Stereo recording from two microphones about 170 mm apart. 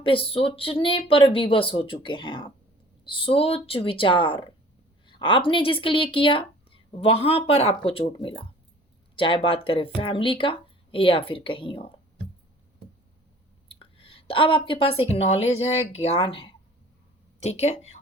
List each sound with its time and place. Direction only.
0.0 s speech: 30° left (ahead or behind)
13.7 s a woman's voice: 30° left (ahead or behind)